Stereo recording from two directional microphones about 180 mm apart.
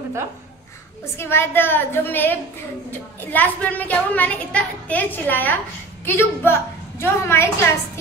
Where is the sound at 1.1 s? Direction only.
15° left (ahead or behind).